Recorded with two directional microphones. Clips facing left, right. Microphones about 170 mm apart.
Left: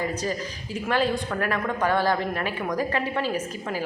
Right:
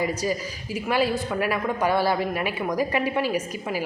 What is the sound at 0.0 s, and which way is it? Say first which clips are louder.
A woman's voice: right 2 dB; 10° right (ahead or behind).